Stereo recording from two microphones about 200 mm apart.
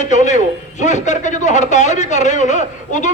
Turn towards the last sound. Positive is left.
turn(degrees=35)  # may be behind; listen again after turning